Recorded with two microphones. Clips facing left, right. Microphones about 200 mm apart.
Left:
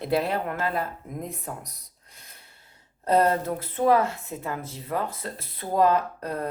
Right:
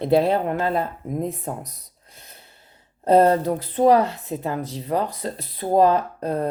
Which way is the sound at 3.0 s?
30° right (ahead or behind).